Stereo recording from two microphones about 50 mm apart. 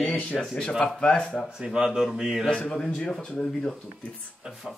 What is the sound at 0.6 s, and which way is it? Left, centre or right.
Speech, centre.